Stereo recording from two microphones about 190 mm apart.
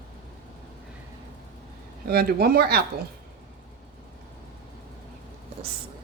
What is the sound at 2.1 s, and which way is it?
Speech, 55° right (ahead or behind).